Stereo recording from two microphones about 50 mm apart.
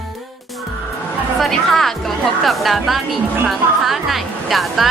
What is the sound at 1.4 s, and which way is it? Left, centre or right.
Speech, centre.